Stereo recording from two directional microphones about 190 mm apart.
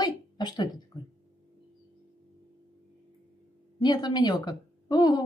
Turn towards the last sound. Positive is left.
turn(degrees=20)  # may be behind; listen again after turning